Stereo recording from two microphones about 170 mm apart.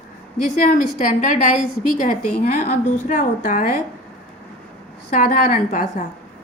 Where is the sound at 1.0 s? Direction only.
45° left (ahead or behind).